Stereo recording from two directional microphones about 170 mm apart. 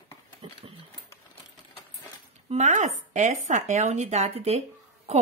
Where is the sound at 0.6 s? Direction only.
35° right (ahead or behind).